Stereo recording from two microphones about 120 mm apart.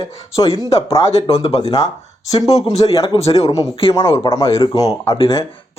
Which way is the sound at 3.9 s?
25° left (ahead or behind).